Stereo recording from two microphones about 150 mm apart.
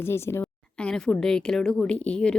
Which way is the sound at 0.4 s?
5° left (ahead or behind).